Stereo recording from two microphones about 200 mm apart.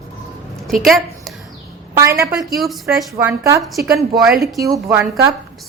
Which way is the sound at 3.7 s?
Centre (ahead or behind).